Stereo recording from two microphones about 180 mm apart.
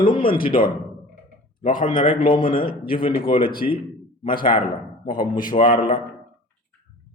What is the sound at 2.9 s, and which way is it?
Speech, 25° left (ahead or behind).